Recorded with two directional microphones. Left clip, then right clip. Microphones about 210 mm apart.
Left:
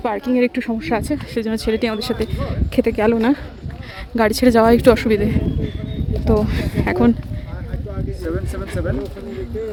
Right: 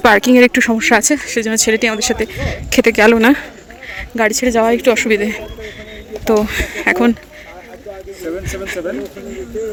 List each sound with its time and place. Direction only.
0.0 s speech: 10° right (ahead or behind)
3.9 s speech: 15° left (ahead or behind)
5.0 s speech: 10° left (ahead or behind)
8.3 s speech: 5° left (ahead or behind)